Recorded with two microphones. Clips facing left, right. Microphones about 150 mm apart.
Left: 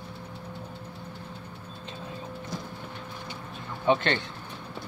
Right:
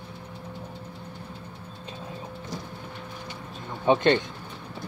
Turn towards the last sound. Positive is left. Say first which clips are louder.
# right 4 dB
turn(degrees=-20)  # may be behind; listen again after turning